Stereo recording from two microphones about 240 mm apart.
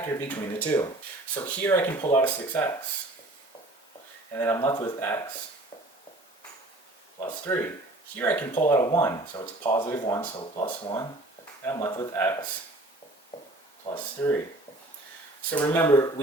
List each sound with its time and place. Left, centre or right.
0.0 s speech: centre
4.4 s speech: centre
7.2 s speech: centre
13.9 s speech: centre
15.5 s speech: centre